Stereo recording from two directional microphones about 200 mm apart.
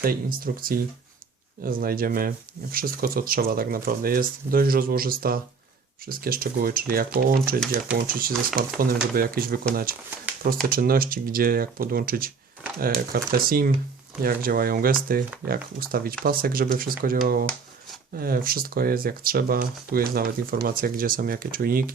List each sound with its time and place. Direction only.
0.0 s speech: 45° right (ahead or behind)